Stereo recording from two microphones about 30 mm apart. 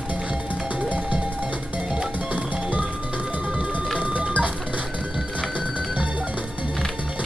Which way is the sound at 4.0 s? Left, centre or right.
Right.